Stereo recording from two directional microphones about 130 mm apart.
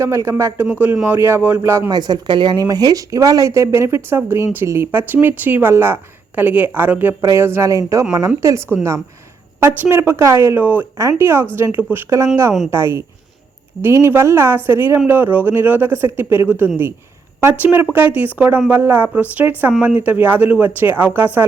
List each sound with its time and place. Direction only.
0.0 s speech: 20° right (ahead or behind)
1.9 s speech: 30° right (ahead or behind); by 21.2 s 15° right (ahead or behind)